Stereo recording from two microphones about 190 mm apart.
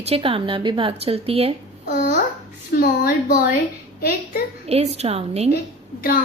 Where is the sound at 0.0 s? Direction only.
30° right (ahead or behind).